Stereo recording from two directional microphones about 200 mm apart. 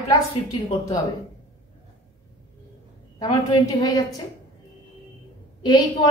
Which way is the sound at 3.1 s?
20° left (ahead or behind).